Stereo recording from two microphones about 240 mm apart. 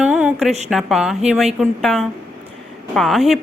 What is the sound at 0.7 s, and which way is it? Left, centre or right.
A woman's voice, centre.